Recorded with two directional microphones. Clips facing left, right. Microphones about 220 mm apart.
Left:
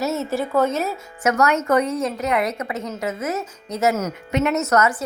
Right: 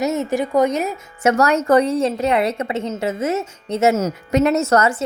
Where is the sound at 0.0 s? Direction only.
15° right (ahead or behind).